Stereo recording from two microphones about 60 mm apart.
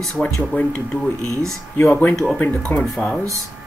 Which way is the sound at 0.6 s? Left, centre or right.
Left.